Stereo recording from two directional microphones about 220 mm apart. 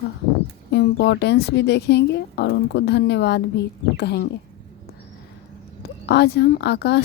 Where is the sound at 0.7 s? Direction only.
50° left (ahead or behind).